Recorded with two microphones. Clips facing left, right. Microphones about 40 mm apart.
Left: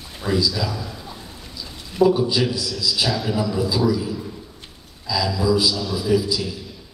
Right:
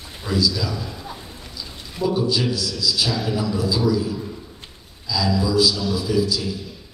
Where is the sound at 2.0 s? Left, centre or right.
Left.